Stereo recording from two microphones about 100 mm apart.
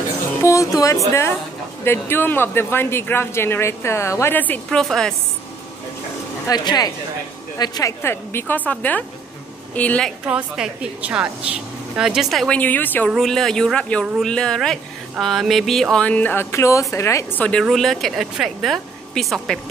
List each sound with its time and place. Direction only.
0.4 s speech: 30° left (ahead or behind)
4.6 s speech: 5° left (ahead or behind)
6.4 s speech: 45° left (ahead or behind)
8.0 s speech: 25° left (ahead or behind)
10.2 s a woman's voice: 10° right (ahead or behind)
12.5 s speech: 15° left (ahead or behind)
13.1 s speech: 5° left (ahead or behind)
16.5 s speech: 30° left (ahead or behind)
17.4 s speech: 10° left (ahead or behind)